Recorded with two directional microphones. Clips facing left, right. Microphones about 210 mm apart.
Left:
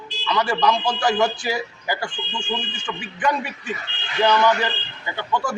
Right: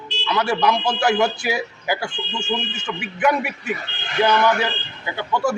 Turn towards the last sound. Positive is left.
turn(degrees=-10)  # may be behind; listen again after turning